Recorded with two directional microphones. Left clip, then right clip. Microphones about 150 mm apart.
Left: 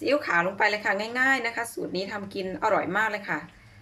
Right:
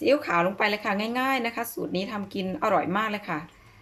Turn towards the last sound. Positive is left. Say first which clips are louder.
# left 2 dB
turn(degrees=-15)  # may be behind; listen again after turning